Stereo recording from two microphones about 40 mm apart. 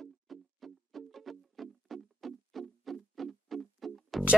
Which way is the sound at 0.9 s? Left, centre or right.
Centre.